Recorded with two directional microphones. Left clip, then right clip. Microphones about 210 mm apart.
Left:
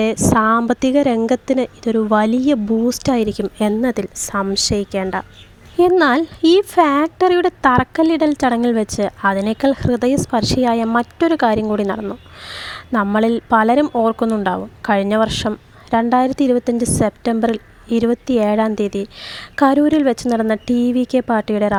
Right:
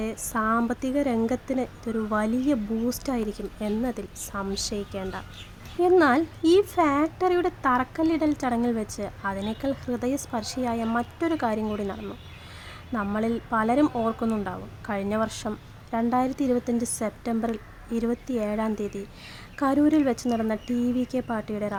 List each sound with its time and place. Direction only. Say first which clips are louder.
0.0 s speech: left 13 dB; 40° left (ahead or behind)